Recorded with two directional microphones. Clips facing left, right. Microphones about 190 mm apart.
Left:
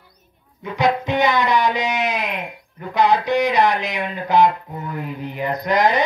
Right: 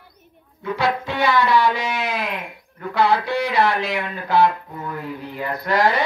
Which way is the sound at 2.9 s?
20° left (ahead or behind).